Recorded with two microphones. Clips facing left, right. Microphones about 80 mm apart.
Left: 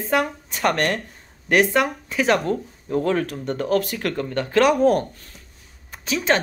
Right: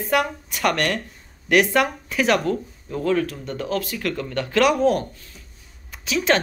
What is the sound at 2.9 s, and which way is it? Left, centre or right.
Speech, left.